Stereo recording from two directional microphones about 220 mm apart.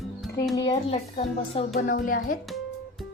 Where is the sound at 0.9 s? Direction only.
30° left (ahead or behind).